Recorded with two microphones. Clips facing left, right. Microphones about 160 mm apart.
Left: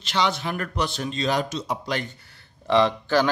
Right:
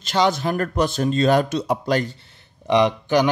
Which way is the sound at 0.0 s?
45° right (ahead or behind).